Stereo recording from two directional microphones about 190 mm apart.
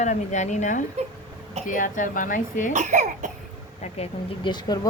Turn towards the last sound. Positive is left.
turn(degrees=20)  # may be behind; listen again after turning